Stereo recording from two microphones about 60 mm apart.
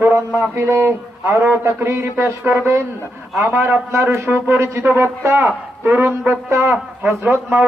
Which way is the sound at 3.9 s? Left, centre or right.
Right.